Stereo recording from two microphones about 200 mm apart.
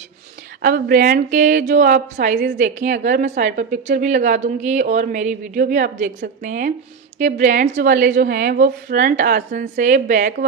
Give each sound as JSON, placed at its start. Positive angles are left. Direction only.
{"t": 0.6, "sound": "a woman's voice", "side_deg": -45}